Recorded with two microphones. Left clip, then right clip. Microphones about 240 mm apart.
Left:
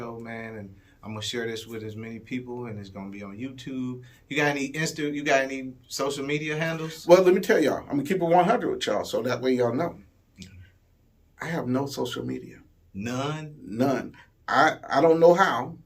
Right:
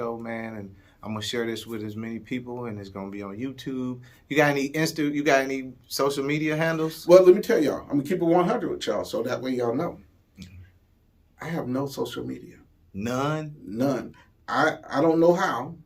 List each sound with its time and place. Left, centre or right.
0.0 s a sound: centre
1.0 s speech: centre
7.1 s speech: centre
11.3 s speech: centre
13.0 s speech: centre
13.7 s speech: centre